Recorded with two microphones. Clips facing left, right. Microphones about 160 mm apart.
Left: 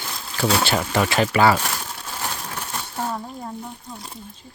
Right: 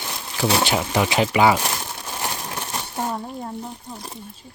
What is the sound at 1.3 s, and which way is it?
Crumpling, 15° right (ahead or behind).